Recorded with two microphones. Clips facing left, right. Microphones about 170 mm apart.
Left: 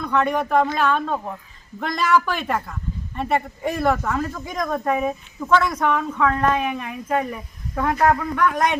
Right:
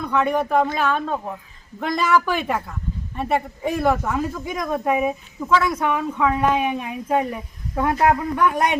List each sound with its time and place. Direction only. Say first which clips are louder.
0.0 s speech: right 1 dB; 5° right (ahead or behind)